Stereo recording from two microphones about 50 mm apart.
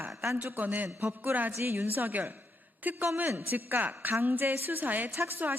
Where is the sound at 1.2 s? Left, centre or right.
Right.